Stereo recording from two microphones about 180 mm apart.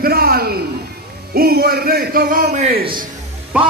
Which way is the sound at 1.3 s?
55° right (ahead or behind).